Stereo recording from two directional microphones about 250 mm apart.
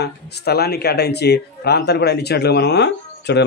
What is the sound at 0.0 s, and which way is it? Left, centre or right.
A man's voice, left.